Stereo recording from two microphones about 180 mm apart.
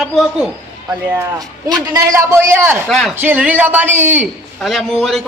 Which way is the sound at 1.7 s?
20° right (ahead or behind).